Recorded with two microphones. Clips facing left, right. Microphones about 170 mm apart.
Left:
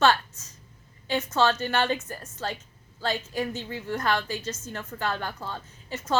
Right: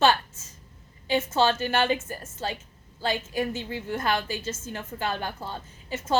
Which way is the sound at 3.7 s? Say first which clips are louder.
Even; 25° right (ahead or behind).